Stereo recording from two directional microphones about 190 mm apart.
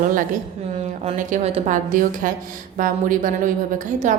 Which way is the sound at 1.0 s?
35° right (ahead or behind).